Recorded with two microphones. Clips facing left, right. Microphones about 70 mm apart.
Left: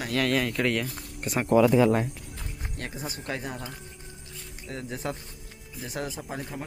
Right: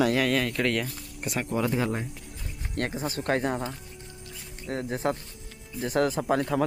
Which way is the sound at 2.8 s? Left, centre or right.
Right.